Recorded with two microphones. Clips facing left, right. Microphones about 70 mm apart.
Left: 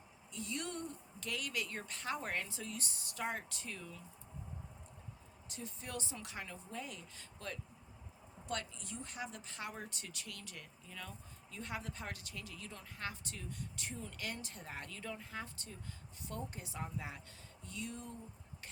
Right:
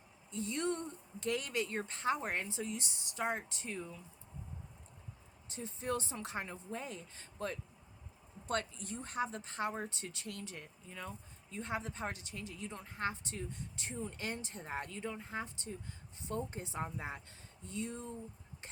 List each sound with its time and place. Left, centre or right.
0.3 s a woman's voice: right
5.5 s a woman's voice: right